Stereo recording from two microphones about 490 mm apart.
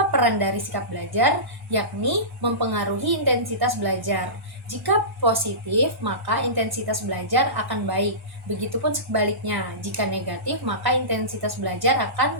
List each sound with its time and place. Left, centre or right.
0.1 s a woman's voice: right